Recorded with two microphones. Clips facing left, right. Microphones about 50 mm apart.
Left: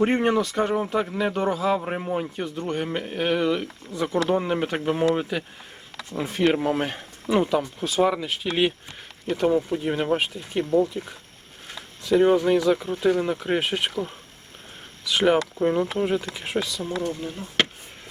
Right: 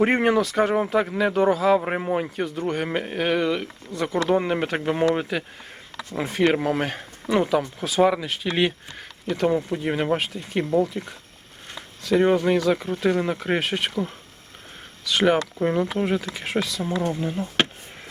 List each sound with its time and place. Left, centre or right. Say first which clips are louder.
0.0 s speech: right 2 dB; centre
1.8 s speech: right 3 dB; right
2.3 s speech: right 2 dB; centre
2.8 s speech: right 2 dB; right
3.1 s speech: left 1 dB; centre
12.2 s speech: left 1 dB; centre
15.0 s speech: even; centre
15.5 s speech: even; centre
16.1 s speech: right 1 dB; centre
16.8 s speech: right 3 dB; right